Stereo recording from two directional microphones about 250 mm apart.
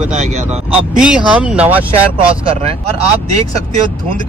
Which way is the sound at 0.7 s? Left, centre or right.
Centre.